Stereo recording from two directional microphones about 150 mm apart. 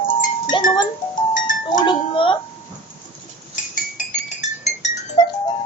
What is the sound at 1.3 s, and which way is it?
Music, 60° left (ahead or behind).